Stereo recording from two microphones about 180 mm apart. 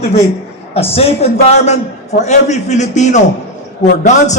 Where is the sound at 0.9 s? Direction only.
35° left (ahead or behind).